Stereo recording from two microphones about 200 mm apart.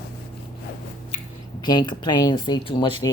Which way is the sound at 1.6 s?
20° left (ahead or behind).